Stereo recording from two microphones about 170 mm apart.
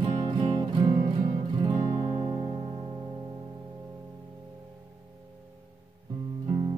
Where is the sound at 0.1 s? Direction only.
30° right (ahead or behind).